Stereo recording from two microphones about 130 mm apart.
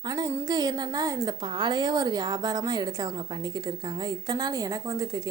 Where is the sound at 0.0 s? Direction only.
30° right (ahead or behind).